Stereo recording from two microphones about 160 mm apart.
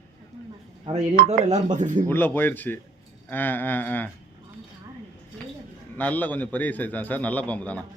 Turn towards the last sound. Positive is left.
turn(degrees=10)  # may be behind; listen again after turning